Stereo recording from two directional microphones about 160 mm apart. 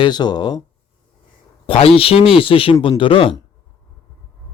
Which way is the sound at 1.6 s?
35° left (ahead or behind).